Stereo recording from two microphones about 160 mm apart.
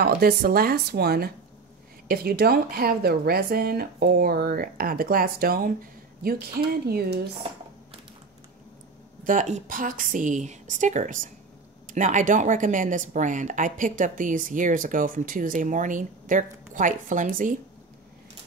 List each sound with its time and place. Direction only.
0.0 s speech: 75° right (ahead or behind)
9.2 s a woman's voice: 50° right (ahead or behind)